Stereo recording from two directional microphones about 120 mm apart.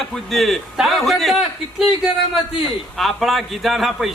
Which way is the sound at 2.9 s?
Centre (ahead or behind).